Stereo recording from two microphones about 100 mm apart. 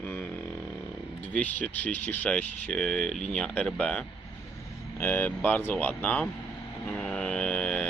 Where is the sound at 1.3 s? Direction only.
15° left (ahead or behind).